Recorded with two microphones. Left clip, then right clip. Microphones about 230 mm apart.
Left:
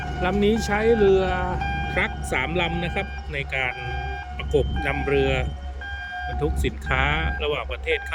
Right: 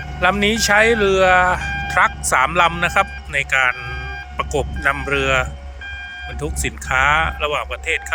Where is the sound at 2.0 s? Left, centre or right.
Centre.